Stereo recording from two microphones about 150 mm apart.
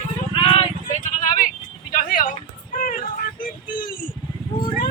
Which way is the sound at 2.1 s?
65° left (ahead or behind).